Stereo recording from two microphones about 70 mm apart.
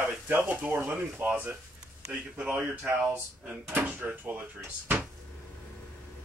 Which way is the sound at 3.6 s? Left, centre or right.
Right.